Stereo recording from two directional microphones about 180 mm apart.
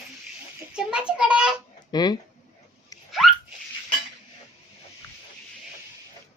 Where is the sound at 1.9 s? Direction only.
20° left (ahead or behind).